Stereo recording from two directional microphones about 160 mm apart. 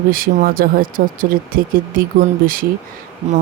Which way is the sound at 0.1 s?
65° right (ahead or behind).